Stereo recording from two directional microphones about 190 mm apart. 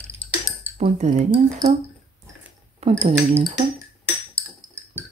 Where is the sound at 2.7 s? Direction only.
35° right (ahead or behind).